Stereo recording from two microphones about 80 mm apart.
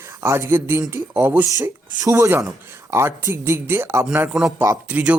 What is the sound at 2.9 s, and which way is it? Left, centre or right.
Speech, right.